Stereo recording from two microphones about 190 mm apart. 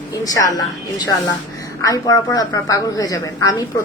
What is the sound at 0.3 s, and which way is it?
A woman's voice, 20° left (ahead or behind).